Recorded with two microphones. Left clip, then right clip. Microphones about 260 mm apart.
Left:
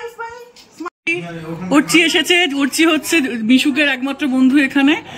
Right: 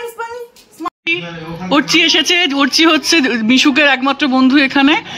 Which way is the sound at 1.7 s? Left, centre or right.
Centre.